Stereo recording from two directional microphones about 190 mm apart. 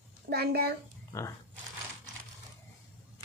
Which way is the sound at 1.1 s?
15° left (ahead or behind).